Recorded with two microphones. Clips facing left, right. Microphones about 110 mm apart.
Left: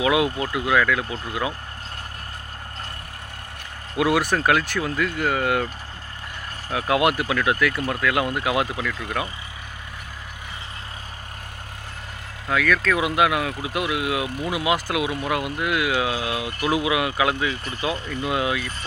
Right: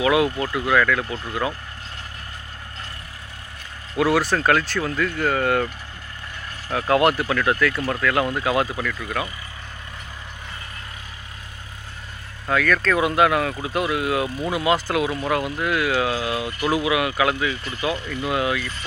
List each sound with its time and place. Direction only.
0.0 s speech: 15° left (ahead or behind)
3.9 s speech: 15° left (ahead or behind)
6.7 s speech: 10° left (ahead or behind)
12.5 s speech: 5° left (ahead or behind); by 18.6 s 20° left (ahead or behind)